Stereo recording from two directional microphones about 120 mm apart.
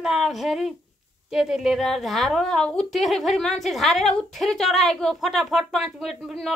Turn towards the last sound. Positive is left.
turn(degrees=0)  # may be behind; listen again after turning